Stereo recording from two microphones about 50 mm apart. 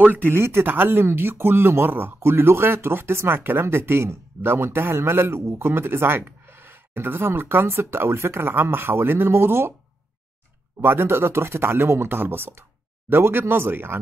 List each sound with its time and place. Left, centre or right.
0.0 s a man's voice: right
10.8 s speech: right